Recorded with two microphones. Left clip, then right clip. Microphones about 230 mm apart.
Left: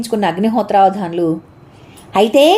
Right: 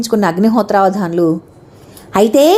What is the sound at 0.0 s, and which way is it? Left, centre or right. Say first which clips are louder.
Speech: right 3 dB; centre.